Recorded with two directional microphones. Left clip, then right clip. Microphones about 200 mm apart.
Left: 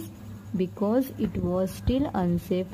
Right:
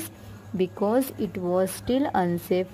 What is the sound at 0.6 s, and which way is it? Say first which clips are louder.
A woman's voice: right 2 dB; 15° right (ahead or behind).